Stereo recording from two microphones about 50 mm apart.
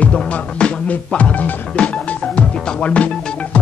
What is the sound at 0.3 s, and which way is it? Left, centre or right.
Music, left.